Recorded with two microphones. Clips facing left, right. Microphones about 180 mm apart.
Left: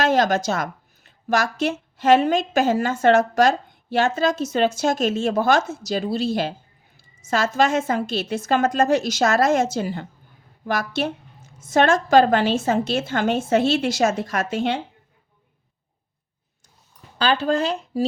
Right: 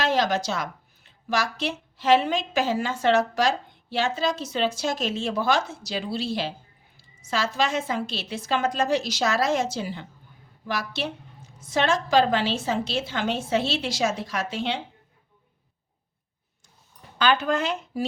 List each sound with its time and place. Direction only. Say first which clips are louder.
0.0 s speech: left 5 dB; 45° left (ahead or behind)
17.2 s speech: left 2 dB; 30° left (ahead or behind)